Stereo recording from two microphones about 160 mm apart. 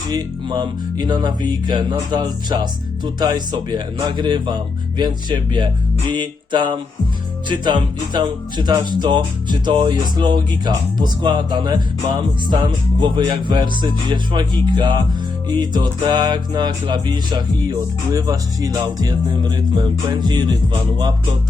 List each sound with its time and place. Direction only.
0.1 s music: 25° right (ahead or behind)